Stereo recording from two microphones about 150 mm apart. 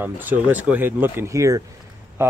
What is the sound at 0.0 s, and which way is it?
Speech, 10° right (ahead or behind).